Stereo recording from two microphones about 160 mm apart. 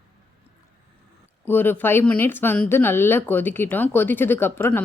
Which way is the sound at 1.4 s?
10° left (ahead or behind).